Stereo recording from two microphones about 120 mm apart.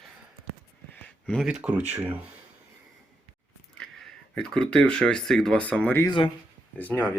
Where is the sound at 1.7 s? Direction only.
15° right (ahead or behind).